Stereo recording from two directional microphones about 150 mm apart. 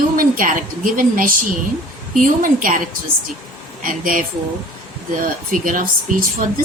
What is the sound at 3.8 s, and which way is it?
Speech, 60° right (ahead or behind).